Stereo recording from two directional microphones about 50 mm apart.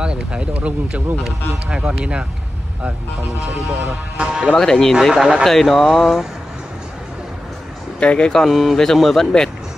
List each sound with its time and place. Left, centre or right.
0.0 s speech: centre
1.2 s speech: centre
3.8 s speech: centre
4.6 s speech: centre
5.1 s speech: centre
5.4 s speech: centre
8.0 s speech: left
8.5 s speech: centre